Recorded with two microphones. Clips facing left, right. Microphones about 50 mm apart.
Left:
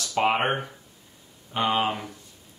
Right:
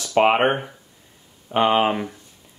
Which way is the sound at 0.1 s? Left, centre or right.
Right.